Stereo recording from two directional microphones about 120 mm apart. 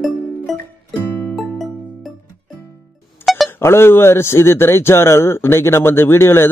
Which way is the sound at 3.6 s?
20° left (ahead or behind).